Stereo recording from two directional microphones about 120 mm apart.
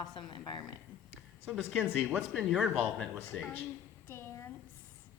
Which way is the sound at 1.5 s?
5° right (ahead or behind).